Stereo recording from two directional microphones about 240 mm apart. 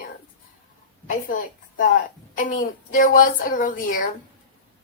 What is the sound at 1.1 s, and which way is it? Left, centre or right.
Speech, left.